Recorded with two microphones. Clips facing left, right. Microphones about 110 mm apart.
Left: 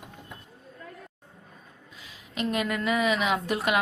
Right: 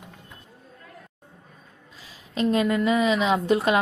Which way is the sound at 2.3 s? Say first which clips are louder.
Right 6 dB; 30° right (ahead or behind).